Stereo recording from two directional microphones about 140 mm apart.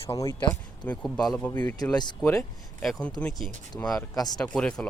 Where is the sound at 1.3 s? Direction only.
10° left (ahead or behind).